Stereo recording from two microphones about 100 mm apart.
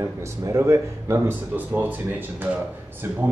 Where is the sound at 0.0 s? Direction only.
30° right (ahead or behind).